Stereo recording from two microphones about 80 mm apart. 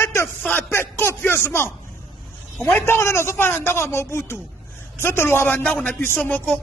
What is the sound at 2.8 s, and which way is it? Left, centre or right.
Speech, left.